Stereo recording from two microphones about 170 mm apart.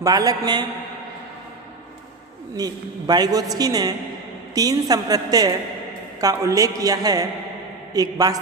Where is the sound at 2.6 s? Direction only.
20° right (ahead or behind).